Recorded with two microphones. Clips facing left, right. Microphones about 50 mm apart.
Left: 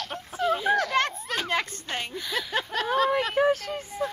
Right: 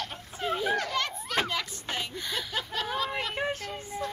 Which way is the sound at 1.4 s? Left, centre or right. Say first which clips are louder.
Left 5 dB; left.